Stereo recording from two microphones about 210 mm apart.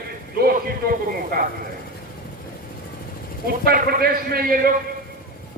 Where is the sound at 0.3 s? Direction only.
45° right (ahead or behind).